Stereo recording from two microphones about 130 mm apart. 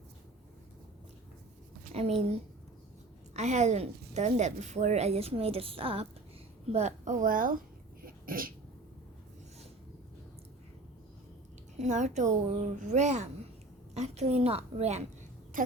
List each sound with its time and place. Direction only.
1.9 s a woman's voice: 55° right (ahead or behind)
3.3 s a woman's voice: 60° right (ahead or behind); by 6.1 s 45° right (ahead or behind)
6.7 s a woman's voice: 55° right (ahead or behind); by 7.6 s 90° right
8.0 s throat clearing: 90° right
11.8 s a woman's voice: 65° right (ahead or behind)
15.6 s speech: 90° right